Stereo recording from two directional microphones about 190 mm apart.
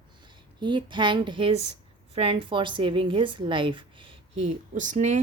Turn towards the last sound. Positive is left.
turn(degrees=-40)  # may be behind; listen again after turning